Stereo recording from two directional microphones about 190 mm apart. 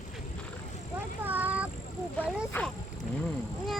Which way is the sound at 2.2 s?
10° left (ahead or behind).